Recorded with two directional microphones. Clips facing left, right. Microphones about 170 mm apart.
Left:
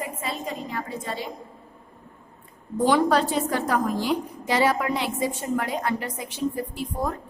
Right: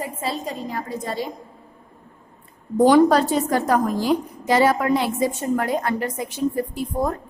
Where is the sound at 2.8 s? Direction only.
40° right (ahead or behind).